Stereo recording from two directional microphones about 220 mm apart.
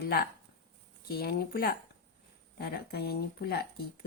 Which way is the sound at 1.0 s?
45° left (ahead or behind).